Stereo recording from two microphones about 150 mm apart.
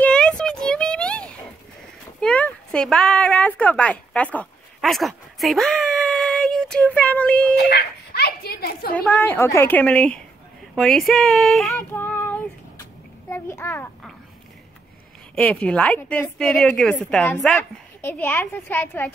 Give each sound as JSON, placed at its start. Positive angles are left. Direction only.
{"t": 0.0, "sound": "a sound", "side_deg": 5}
{"t": 2.1, "sound": "speech", "side_deg": 5}
{"t": 7.6, "sound": "speech", "side_deg": 90}
{"t": 8.9, "sound": "a woman's voice", "side_deg": 10}
{"t": 11.9, "sound": "child singing", "side_deg": 15}
{"t": 13.3, "sound": "a woman's voice", "side_deg": 15}
{"t": 15.3, "sound": "a woman's voice", "side_deg": 5}